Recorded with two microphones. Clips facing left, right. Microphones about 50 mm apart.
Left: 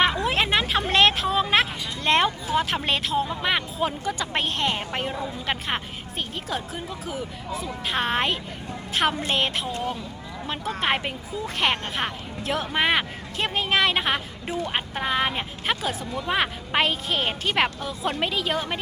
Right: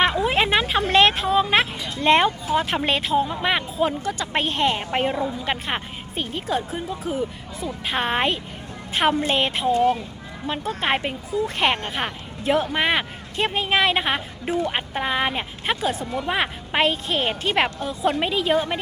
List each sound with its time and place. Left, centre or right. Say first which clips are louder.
0.0 s a woman's voice: right 2 dB; centre
4.9 s a woman's voice: right 6 dB; right
5.5 s a woman's voice: right 2 dB; centre